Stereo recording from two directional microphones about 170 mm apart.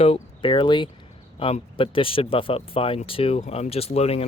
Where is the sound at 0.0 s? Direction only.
35° left (ahead or behind).